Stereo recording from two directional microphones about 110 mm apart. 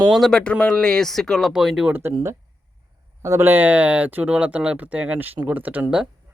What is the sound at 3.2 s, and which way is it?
Speech, 25° right (ahead or behind).